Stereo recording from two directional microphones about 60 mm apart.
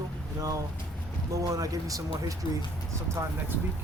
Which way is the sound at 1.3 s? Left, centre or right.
Right.